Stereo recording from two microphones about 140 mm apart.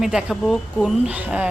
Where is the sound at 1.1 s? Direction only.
10° right (ahead or behind).